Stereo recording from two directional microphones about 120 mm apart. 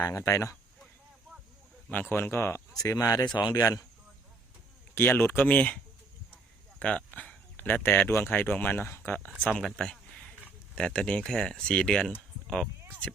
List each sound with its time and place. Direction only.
0.1 s speech: 25° left (ahead or behind)
1.9 s speech: 15° left (ahead or behind); by 3.6 s 35° left (ahead or behind)
4.9 s speech: 15° left (ahead or behind)
9.4 s a man's voice: 5° left (ahead or behind)